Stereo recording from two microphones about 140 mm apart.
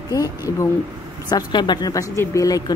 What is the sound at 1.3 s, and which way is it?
A woman's voice, 30° left (ahead or behind).